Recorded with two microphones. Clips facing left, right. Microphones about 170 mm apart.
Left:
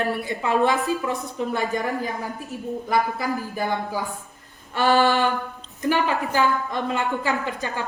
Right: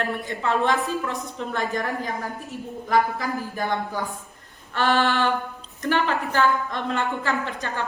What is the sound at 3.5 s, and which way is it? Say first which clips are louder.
Speech: left 1 dB; 5° left (ahead or behind).